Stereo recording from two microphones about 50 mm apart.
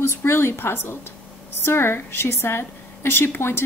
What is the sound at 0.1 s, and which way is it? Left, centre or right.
A woman's voice, left.